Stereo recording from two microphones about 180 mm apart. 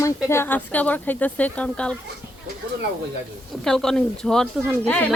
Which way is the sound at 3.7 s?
5° left (ahead or behind).